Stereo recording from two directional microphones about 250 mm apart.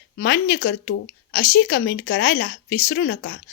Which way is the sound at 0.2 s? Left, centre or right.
Left.